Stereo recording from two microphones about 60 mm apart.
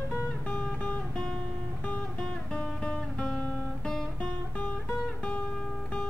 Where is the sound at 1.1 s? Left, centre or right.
Centre.